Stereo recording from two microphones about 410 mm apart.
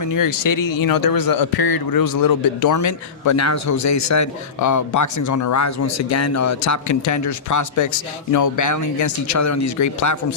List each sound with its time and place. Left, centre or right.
0.0 s a man's voice: left